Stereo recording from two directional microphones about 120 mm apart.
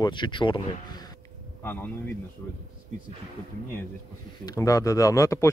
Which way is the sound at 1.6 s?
15° left (ahead or behind).